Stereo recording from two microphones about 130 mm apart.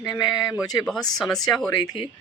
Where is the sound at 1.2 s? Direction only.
5° left (ahead or behind).